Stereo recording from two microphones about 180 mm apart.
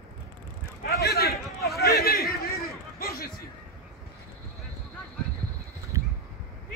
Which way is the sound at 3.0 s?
55° left (ahead or behind).